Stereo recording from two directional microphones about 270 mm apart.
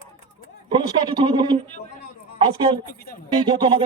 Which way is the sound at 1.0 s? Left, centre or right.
Centre.